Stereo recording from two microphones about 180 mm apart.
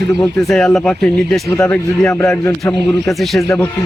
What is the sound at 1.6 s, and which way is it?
Speech, 15° left (ahead or behind).